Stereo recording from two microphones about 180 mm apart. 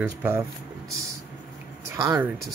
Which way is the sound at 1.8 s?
15° right (ahead or behind).